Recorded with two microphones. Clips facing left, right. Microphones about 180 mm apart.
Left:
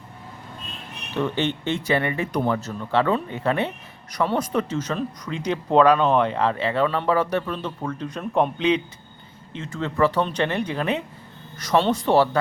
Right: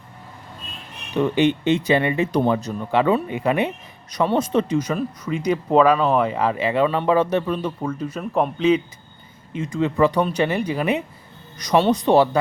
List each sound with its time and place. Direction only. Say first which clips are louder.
1.1 s speech: right 6 dB; 15° right (ahead or behind)
4.8 s speech: right 3 dB; 10° right (ahead or behind)
9.5 s speech: right 7 dB; 15° right (ahead or behind)